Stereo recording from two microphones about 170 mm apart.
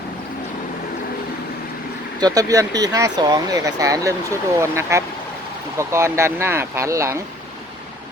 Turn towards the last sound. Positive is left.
turn(degrees=-15)  # may be behind; listen again after turning